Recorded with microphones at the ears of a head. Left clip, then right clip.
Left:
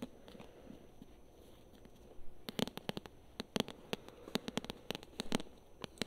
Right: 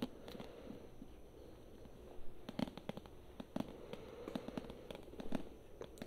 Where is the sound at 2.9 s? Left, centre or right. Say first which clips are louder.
Left 5 dB; left.